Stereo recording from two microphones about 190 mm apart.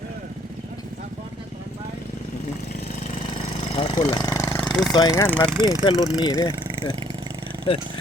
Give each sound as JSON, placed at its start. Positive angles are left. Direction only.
{"t": 3.8, "sound": "speech", "side_deg": 30}
{"t": 4.4, "sound": "a sound", "side_deg": 5}
{"t": 4.9, "sound": "speech", "side_deg": 20}
{"t": 5.5, "sound": "speech", "side_deg": -15}
{"t": 6.0, "sound": "speech", "side_deg": 20}